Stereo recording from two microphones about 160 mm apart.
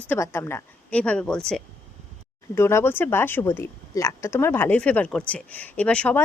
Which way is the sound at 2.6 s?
15° left (ahead or behind).